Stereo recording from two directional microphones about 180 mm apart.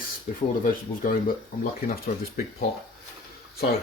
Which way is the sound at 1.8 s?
55° left (ahead or behind).